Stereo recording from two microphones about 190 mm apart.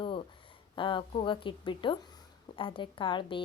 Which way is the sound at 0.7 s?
25° left (ahead or behind).